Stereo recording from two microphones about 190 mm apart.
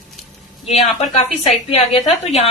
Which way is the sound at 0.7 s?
35° left (ahead or behind).